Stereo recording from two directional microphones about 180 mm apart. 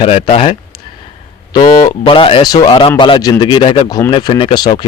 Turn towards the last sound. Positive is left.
turn(degrees=25)  # may be behind; listen again after turning